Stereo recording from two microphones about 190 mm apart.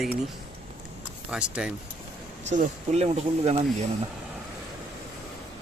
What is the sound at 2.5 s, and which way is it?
Speech, 40° right (ahead or behind).